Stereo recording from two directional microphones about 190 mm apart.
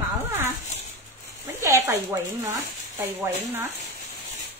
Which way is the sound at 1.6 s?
15° right (ahead or behind).